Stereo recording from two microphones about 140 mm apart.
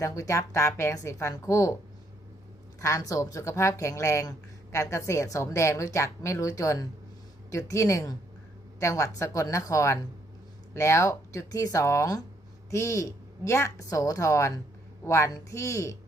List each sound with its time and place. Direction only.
0.0 s speech: 25° left (ahead or behind)
2.8 s speech: 25° left (ahead or behind)